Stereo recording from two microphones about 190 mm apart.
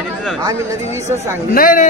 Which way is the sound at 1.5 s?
45° left (ahead or behind).